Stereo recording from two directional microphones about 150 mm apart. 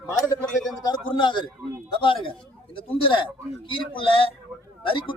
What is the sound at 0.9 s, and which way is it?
Speech, 30° left (ahead or behind).